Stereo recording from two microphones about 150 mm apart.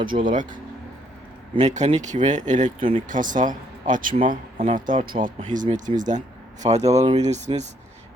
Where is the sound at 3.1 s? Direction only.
60° right (ahead or behind).